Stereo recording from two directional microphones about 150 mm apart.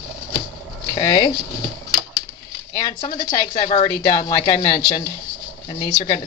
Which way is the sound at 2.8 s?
25° left (ahead or behind).